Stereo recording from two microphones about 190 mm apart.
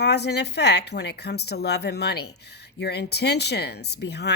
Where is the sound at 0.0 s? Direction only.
60° left (ahead or behind).